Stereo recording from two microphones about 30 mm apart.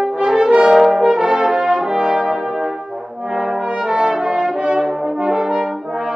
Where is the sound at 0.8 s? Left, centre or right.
Right.